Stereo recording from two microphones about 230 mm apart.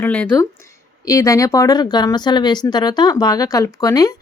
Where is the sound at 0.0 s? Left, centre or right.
Centre.